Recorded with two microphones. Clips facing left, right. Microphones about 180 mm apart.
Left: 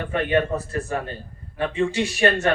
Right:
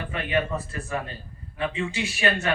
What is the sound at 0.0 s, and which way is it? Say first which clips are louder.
A man's voice: left 5 dB; 50° left (ahead or behind).